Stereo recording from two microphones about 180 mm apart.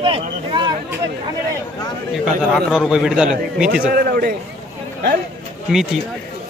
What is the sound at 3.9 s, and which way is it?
Speech, 55° right (ahead or behind).